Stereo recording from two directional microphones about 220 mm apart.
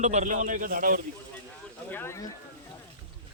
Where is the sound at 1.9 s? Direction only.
10° left (ahead or behind).